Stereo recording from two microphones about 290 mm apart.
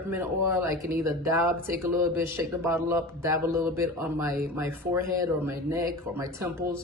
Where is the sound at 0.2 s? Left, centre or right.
Centre.